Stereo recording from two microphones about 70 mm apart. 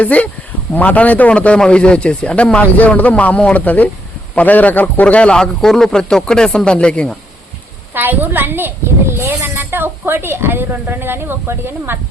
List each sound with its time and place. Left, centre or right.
0.0 s a man's voice: left
7.9 s a woman's voice: right